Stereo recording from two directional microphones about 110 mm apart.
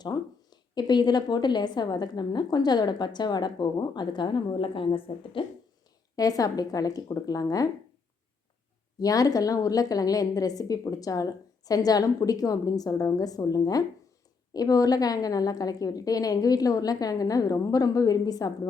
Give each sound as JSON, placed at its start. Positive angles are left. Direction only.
{"t": 0.0, "sound": "a woman's voice", "side_deg": 40}
{"t": 6.1, "sound": "a woman's voice", "side_deg": 35}
{"t": 9.0, "sound": "a woman's voice", "side_deg": 35}